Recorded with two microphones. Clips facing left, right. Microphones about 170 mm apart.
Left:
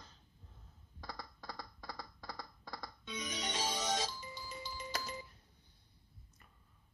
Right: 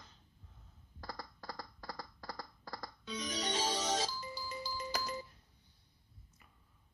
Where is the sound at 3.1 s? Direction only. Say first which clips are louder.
Right 3 dB; 35° right (ahead or behind).